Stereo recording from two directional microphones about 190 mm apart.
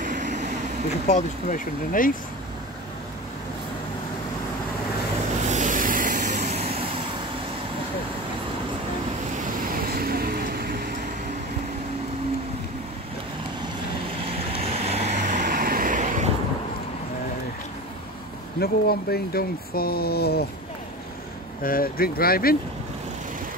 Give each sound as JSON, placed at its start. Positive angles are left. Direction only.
{"t": 0.0, "sound": "vehicle", "side_deg": -45}
{"t": 1.0, "sound": "speech", "side_deg": 40}
{"t": 5.5, "sound": "vehicle", "side_deg": -40}
{"t": 9.4, "sound": "vehicle", "side_deg": -50}
{"t": 14.9, "sound": "vehicle", "side_deg": -35}
{"t": 18.6, "sound": "speech", "side_deg": 55}
{"t": 21.6, "sound": "speech", "side_deg": 50}